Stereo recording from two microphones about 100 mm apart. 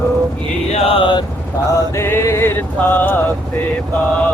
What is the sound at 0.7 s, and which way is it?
Chant, 80° left.